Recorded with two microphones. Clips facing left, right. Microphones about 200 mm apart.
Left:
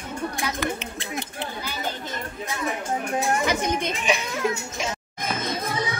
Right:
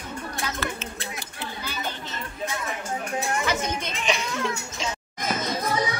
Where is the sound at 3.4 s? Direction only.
15° left (ahead or behind).